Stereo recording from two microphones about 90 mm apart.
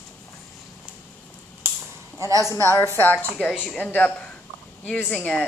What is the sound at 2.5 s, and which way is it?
Speech, 30° left (ahead or behind).